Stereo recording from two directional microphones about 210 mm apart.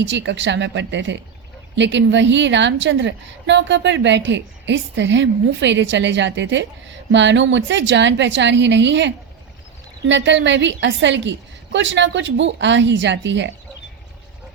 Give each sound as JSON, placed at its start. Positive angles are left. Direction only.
{"t": 0.0, "sound": "a woman's voice", "side_deg": -60}